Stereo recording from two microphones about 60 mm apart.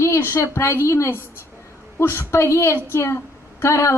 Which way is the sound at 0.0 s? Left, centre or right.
Left.